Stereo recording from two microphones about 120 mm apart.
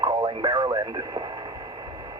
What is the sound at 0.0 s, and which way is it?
Radio, 40° right (ahead or behind).